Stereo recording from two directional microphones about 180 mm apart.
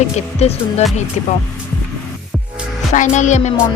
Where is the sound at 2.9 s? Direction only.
40° left (ahead or behind).